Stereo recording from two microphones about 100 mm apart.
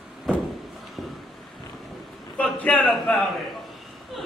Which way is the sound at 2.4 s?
10° left (ahead or behind).